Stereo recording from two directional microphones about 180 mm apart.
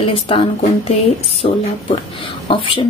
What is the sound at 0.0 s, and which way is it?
A woman's voice, 30° left (ahead or behind).